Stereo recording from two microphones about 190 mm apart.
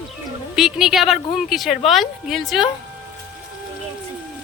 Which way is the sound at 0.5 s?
Centre (ahead or behind).